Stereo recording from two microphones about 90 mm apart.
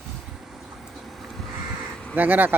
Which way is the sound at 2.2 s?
20° right (ahead or behind).